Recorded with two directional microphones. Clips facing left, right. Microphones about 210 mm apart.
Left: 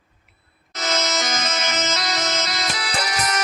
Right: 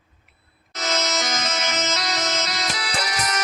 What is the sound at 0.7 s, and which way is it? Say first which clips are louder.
Music: left 1 dB; 55° left (ahead or behind).